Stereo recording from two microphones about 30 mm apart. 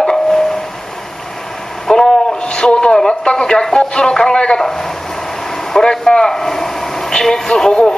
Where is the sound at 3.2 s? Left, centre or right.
Left.